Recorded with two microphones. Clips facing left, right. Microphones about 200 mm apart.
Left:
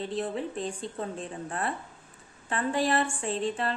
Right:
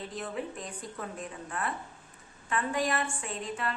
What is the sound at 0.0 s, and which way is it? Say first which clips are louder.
Speech: left 5 dB; 30° left (ahead or behind).